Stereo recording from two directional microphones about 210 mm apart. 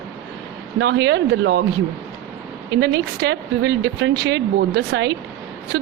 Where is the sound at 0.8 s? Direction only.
55° right (ahead or behind).